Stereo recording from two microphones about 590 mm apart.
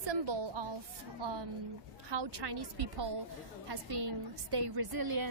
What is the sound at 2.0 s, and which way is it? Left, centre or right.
A woman's voice, right.